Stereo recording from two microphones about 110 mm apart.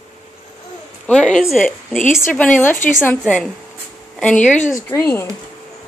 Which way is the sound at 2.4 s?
15° left (ahead or behind).